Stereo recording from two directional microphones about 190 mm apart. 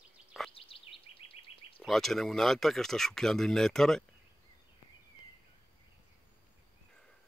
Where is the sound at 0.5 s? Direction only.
30° left (ahead or behind).